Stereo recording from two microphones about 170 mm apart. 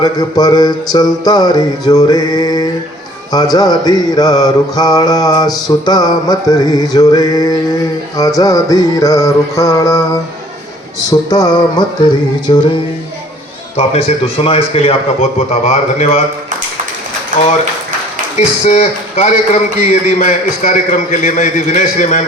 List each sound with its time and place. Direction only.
0.0 s mantra: 20° left (ahead or behind)
11.1 s mantra: 20° left (ahead or behind)
12.5 s a man's voice: 30° left (ahead or behind)
13.7 s a man's voice: 40° left (ahead or behind)
18.3 s a man's voice: 40° left (ahead or behind)